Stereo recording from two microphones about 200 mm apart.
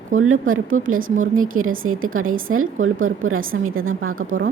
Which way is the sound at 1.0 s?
45° right (ahead or behind).